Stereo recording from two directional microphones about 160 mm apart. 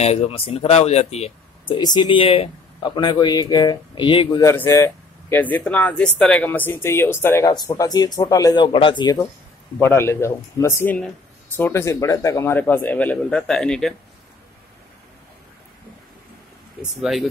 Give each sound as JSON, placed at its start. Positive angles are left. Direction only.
{"t": 0.0, "sound": "speech", "side_deg": 40}
{"t": 1.8, "sound": "speech", "side_deg": 25}
{"t": 4.4, "sound": "speech", "side_deg": 15}
{"t": 9.8, "sound": "speech", "side_deg": 15}
{"t": 17.0, "sound": "speech", "side_deg": 0}